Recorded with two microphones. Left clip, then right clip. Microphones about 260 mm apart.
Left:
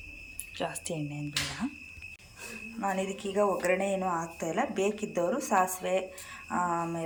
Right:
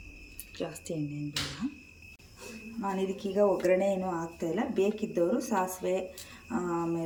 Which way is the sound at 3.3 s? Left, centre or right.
Centre.